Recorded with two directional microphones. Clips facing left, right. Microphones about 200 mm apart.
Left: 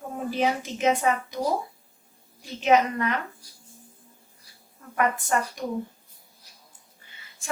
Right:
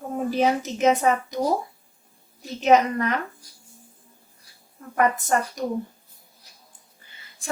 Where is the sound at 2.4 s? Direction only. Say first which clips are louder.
Right 3 dB; 40° right (ahead or behind).